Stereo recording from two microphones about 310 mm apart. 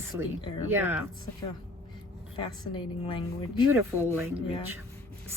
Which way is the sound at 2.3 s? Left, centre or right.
Centre.